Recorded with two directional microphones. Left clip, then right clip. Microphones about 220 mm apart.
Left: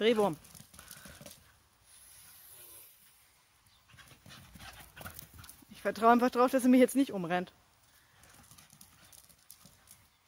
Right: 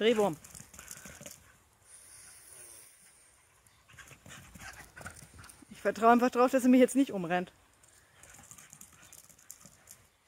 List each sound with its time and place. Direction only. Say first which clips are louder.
0.0 s speech: right 1 dB; centre (ahead or behind)
0.7 s a sound: right 2 dB; 5° right (ahead or behind)
3.9 s dog: right 3 dB; centre (ahead or behind)
4.9 s clip-clop: right 1 dB; 35° left (ahead or behind)
5.8 s speech: right 1 dB; 10° right (ahead or behind)